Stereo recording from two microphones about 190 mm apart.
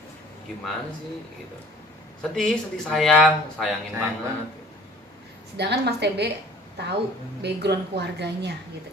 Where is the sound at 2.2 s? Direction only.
5° left (ahead or behind).